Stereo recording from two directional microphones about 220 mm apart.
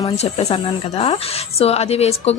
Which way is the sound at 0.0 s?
30° left (ahead or behind).